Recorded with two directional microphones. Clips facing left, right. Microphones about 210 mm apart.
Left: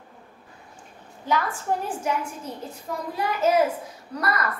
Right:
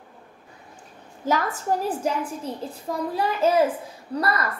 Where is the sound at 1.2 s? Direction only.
40° right (ahead or behind).